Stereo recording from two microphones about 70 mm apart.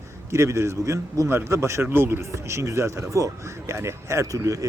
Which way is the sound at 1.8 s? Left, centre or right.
Right.